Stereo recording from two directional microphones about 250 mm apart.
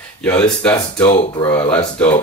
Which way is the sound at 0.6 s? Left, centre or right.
Centre.